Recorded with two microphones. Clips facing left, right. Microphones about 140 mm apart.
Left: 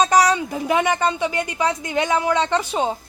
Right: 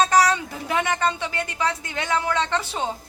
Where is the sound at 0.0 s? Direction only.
15° left (ahead or behind).